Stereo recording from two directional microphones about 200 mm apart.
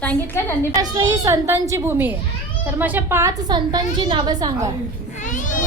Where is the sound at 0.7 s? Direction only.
15° right (ahead or behind).